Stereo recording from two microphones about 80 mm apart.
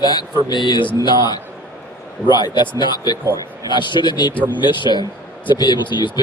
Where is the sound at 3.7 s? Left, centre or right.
Left.